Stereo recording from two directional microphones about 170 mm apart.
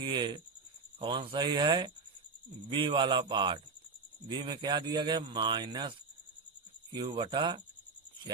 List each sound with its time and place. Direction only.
0.0 s speech: 25° right (ahead or behind)